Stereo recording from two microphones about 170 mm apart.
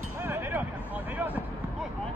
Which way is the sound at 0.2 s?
15° right (ahead or behind).